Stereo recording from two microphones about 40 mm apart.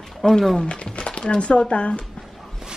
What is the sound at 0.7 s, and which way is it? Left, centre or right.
Speech, left.